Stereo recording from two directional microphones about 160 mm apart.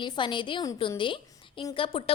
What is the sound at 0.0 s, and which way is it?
A woman's voice, 30° left (ahead or behind).